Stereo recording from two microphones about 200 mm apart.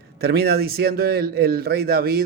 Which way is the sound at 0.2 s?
55° right (ahead or behind).